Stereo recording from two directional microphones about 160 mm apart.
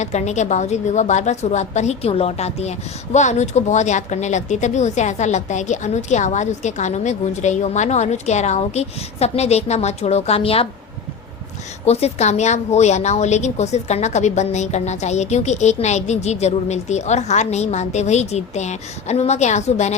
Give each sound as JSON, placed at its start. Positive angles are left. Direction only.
{"t": 0.0, "sound": "a woman's voice", "side_deg": 45}
{"t": 11.9, "sound": "a woman's voice", "side_deg": 40}